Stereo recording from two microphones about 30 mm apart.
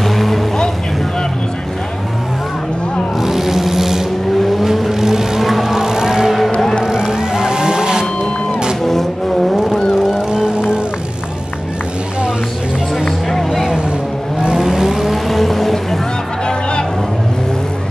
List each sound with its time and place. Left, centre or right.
0.0 s vehicle: centre
3.2 s vehicle: centre
5.5 s a sound: centre
5.8 s music: centre
10.1 s music: right
13.4 s vehicle: centre
14.4 s vehicle: right
14.7 s vehicle: centre